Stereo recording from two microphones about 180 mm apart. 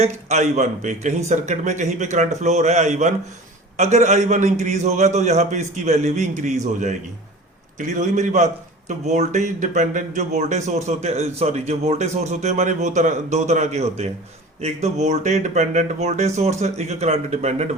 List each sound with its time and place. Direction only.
0.0 s a man's voice: 40° right (ahead or behind)